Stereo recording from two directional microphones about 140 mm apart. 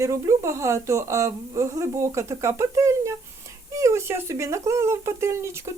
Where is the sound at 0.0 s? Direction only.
20° right (ahead or behind).